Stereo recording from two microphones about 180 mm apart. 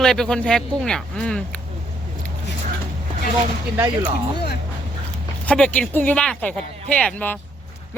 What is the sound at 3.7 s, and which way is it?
Speech, 20° right (ahead or behind).